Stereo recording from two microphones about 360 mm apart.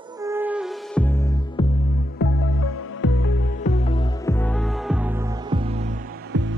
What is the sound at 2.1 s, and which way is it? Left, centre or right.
Music, left.